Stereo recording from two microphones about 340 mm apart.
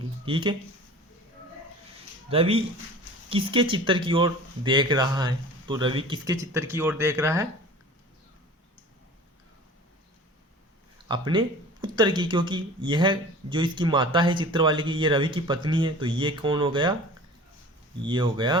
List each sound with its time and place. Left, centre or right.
0.3 s speech: centre
2.3 s speech: centre
11.1 s speech: centre
18.0 s speech: centre